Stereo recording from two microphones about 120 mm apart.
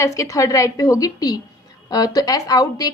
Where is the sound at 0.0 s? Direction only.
25° left (ahead or behind).